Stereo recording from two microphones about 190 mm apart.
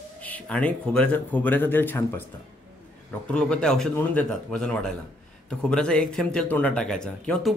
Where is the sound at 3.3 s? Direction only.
5° left (ahead or behind).